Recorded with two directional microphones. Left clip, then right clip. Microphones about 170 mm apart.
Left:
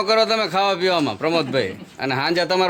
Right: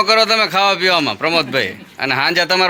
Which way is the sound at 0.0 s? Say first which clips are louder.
Right 5 dB; 10° left (ahead or behind).